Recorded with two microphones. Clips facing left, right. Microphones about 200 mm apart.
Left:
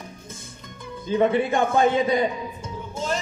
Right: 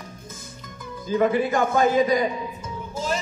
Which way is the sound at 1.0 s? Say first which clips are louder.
Even; 30° left (ahead or behind).